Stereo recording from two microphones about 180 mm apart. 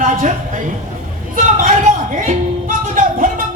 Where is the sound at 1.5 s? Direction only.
45° right (ahead or behind).